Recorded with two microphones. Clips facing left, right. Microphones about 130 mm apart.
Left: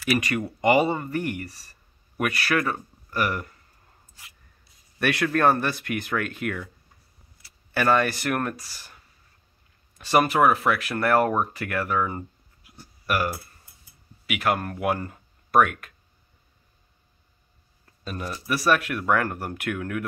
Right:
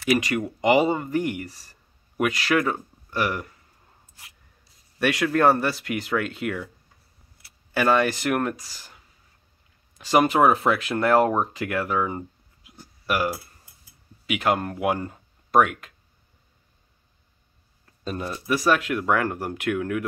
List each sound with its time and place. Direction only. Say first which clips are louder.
0.1 s speech: right 2 dB; 15° right (ahead or behind)
4.9 s speech: right 2 dB; 15° right (ahead or behind)
7.7 s speech: right 1 dB; 15° right (ahead or behind)
18.0 s speech: right 3 dB; 25° right (ahead or behind)